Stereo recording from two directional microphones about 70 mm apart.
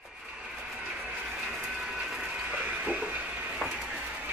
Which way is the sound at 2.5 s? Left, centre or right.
Centre.